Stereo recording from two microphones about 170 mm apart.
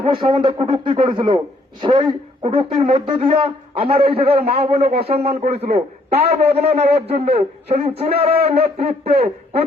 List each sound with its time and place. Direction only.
0.4 s a man's voice: 30° right (ahead or behind)